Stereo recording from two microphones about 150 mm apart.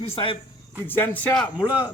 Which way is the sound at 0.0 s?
35° left (ahead or behind).